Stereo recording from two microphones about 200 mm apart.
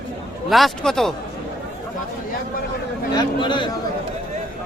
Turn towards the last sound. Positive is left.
turn(degrees=25)  # may be behind; listen again after turning